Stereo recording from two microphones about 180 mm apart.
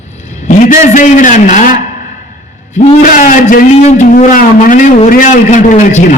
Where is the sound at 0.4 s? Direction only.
45° left (ahead or behind).